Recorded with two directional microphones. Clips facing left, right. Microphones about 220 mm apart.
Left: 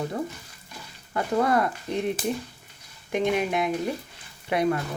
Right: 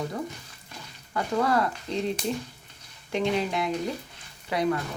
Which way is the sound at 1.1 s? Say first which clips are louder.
Left 2 dB; 25° left (ahead or behind).